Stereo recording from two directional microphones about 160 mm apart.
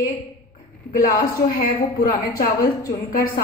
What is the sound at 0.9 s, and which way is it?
A woman's voice, 60° left (ahead or behind).